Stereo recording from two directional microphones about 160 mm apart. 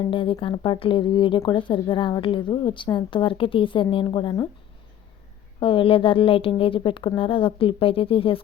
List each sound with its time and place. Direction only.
0.1 s speech: 30° left (ahead or behind)
5.5 s speech: 30° left (ahead or behind)